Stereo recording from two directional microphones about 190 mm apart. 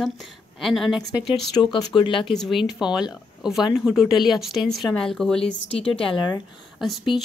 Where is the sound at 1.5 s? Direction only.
25° left (ahead or behind).